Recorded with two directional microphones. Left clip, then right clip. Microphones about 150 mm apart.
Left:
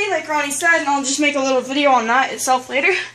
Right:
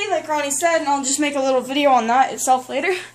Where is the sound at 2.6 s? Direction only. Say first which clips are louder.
Left 4 dB; 50° right (ahead or behind).